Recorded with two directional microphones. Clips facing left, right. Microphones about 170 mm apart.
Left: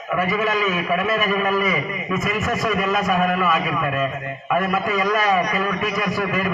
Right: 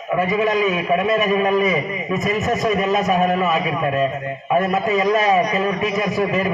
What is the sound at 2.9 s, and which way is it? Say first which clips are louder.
Speech: right 3 dB; 20° right (ahead or behind).